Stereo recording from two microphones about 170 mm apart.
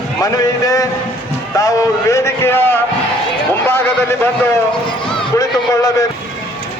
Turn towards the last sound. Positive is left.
turn(degrees=20)  # may be behind; listen again after turning